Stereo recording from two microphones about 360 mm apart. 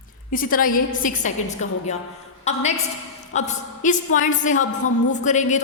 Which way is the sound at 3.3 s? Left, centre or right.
Centre.